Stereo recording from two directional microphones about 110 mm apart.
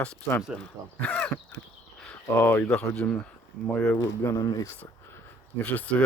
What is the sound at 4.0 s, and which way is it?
Speech, 30° left (ahead or behind).